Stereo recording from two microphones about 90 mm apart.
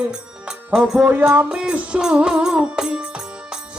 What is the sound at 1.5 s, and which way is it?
Music, 10° right (ahead or behind).